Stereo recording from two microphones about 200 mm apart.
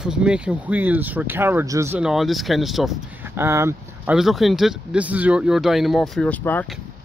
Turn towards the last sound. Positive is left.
turn(degrees=10)  # may be behind; listen again after turning